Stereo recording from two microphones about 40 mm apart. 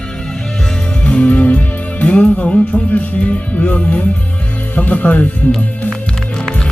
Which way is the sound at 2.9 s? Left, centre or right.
Left.